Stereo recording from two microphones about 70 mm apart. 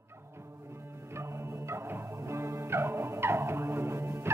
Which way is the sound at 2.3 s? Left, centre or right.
Right.